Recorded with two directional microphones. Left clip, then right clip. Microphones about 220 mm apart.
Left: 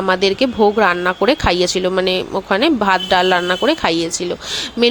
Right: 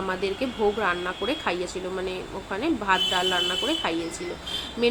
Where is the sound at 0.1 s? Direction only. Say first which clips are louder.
Left 16 dB; 40° left (ahead or behind).